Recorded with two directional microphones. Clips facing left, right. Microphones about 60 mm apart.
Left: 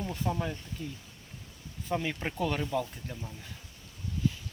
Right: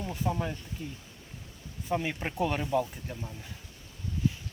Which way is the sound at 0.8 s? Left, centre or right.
Right.